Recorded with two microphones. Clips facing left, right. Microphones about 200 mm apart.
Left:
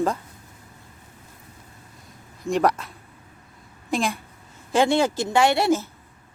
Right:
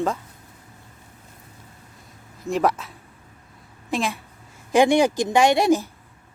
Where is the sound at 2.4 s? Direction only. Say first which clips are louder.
Left 1 dB; centre (ahead or behind).